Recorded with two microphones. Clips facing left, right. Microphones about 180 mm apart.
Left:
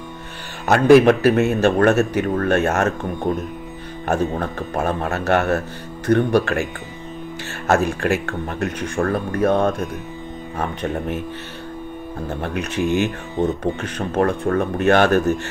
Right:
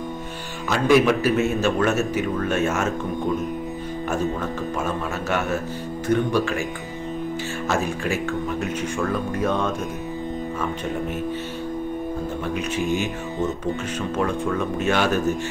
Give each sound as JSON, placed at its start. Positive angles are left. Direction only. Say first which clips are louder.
{"t": 0.7, "sound": "speech", "louder": "left 6 dB", "side_deg": 55}
{"t": 4.1, "sound": "speech", "louder": "left 5 dB", "side_deg": 60}
{"t": 12.4, "sound": "speech", "louder": "left 5 dB", "side_deg": 65}